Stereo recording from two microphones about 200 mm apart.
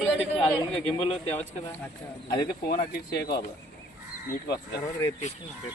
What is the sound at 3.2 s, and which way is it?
Speech, 55° left (ahead or behind).